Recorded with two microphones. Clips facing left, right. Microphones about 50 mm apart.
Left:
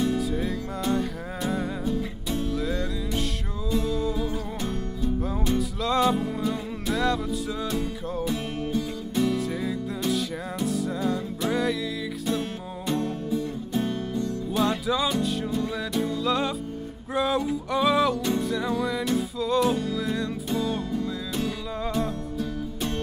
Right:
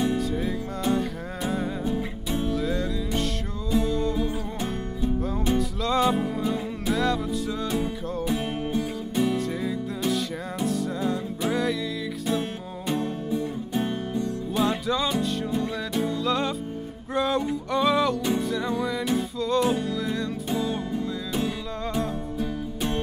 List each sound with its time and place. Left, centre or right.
0.2 s music: centre
1.9 s music: centre
2.5 s music: centre
5.6 s music: centre
7.6 s music: centre
9.7 s music: centre
12.3 s music: centre
14.5 s music: centre
17.1 s a sound: centre
18.4 s music: centre
21.9 s music: centre